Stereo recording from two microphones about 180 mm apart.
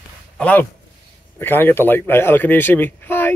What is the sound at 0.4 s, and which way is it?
A man's voice, 10° left (ahead or behind).